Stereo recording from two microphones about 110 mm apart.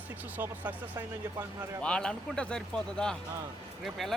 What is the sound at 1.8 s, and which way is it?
Speech, 10° left (ahead or behind).